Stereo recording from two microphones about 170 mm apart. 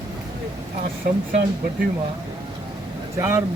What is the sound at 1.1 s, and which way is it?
Speech, 55° right (ahead or behind).